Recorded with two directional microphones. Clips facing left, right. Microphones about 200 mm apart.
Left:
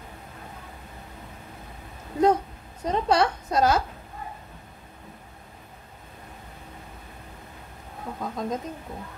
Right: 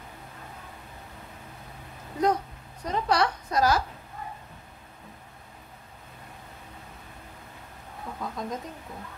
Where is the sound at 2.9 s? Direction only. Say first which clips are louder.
Left 3 dB; 25° left (ahead or behind).